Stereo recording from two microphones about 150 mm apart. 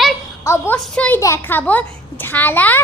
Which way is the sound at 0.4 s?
15° left (ahead or behind).